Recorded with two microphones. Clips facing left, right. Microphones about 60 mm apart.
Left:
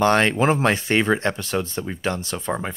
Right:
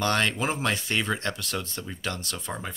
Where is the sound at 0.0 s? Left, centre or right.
Left.